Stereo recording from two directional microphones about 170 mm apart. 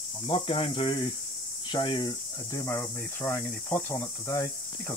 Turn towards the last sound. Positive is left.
turn(degrees=15)  # may be behind; listen again after turning